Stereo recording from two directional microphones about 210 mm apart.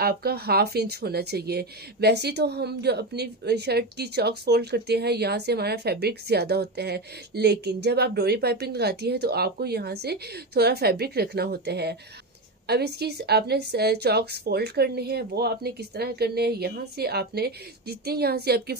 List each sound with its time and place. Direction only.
0.0 s speech: 50° right (ahead or behind)